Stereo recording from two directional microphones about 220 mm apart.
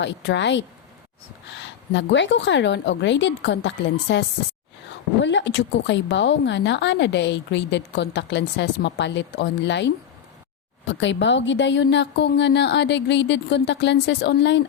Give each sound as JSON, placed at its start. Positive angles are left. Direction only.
{"t": 0.0, "sound": "a woman's voice", "side_deg": 55}